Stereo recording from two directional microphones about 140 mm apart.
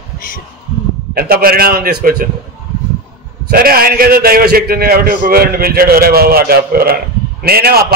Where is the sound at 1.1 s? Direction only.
90° right.